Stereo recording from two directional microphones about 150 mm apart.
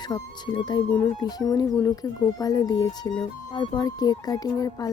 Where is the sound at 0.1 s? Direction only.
30° left (ahead or behind).